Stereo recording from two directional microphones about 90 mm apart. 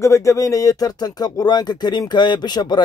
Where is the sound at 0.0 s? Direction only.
35° left (ahead or behind).